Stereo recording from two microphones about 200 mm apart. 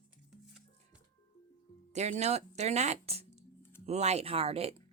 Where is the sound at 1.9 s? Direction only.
35° right (ahead or behind).